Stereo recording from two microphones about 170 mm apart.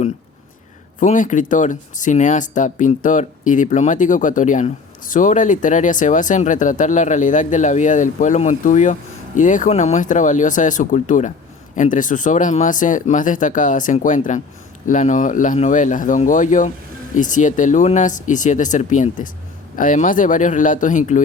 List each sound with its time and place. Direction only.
0.9 s speech: 50° left (ahead or behind)